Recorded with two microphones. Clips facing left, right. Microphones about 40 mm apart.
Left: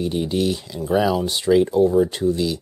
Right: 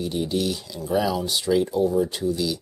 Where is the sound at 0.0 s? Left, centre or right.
Left.